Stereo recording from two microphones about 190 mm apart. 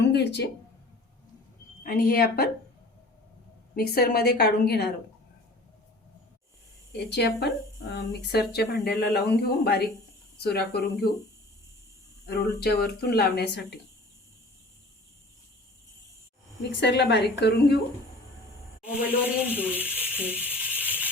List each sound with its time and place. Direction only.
0.0 s speech: 60° left (ahead or behind)
1.8 s speech: 50° left (ahead or behind)
3.8 s speech: 55° left (ahead or behind)
6.9 s speech: 60° left (ahead or behind)
12.2 s speech: 60° left (ahead or behind)
16.7 s speech: 65° left (ahead or behind)
18.9 s speech: 10° right (ahead or behind)